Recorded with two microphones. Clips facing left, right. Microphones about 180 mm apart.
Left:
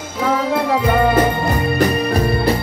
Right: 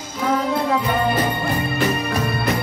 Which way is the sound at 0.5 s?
60° left (ahead or behind).